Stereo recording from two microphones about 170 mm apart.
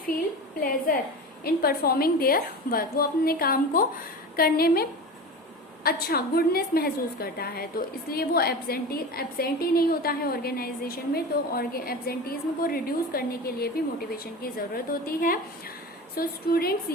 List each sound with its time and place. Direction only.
1.5 s a woman's voice: 65° left (ahead or behind)